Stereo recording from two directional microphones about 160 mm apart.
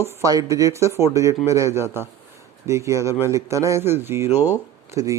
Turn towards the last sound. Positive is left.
turn(degrees=-20)  # may be behind; listen again after turning